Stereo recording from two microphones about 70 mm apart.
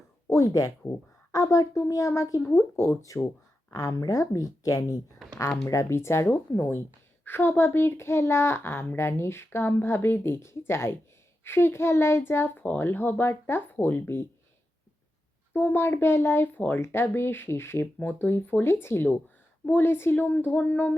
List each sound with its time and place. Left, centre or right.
0.3 s a woman's voice: left
5.6 s a child's voice: left
6.2 s a child's voice: left
15.5 s a child's voice: left